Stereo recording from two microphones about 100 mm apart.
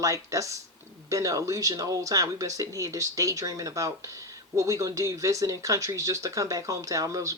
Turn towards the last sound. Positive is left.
turn(degrees=-35)  # may be behind; listen again after turning